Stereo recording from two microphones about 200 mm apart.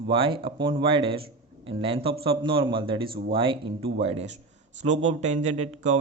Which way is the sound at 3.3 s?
25° right (ahead or behind).